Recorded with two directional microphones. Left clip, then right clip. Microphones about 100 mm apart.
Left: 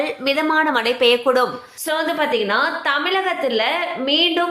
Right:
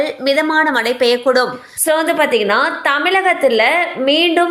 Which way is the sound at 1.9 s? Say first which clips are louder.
Right 6 dB; 65° right (ahead or behind).